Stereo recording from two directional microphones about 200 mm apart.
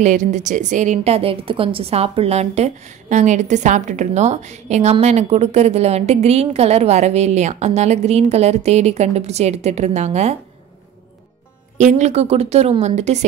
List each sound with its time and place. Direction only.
0.0 s a woman's voice: 35° right (ahead or behind)
11.8 s a woman's voice: 35° right (ahead or behind)